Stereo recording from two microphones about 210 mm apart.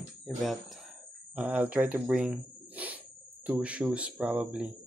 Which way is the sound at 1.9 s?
5° right (ahead or behind).